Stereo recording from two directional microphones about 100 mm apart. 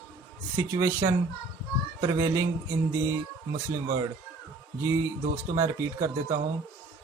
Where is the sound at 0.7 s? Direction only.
30° right (ahead or behind).